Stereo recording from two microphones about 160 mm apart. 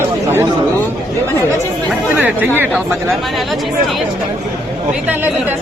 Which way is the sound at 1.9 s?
10° right (ahead or behind).